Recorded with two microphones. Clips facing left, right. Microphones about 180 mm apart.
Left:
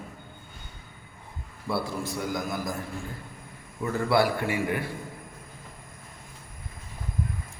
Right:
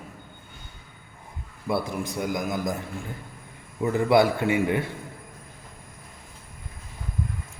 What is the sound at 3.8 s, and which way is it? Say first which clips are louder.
A man's voice: right 4 dB; 20° right (ahead or behind).